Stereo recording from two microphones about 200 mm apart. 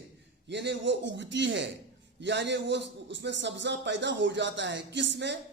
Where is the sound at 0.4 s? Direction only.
60° right (ahead or behind).